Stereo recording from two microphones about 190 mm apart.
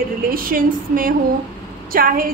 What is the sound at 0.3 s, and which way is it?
A woman's voice, 50° right (ahead or behind).